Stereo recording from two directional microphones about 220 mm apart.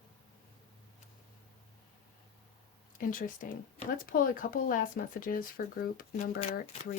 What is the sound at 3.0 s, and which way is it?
Speech, 40° left (ahead or behind).